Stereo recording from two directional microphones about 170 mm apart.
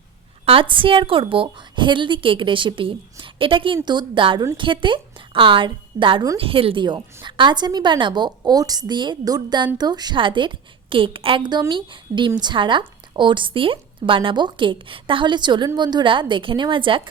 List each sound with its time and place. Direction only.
0.4 s a woman's voice: 30° right (ahead or behind)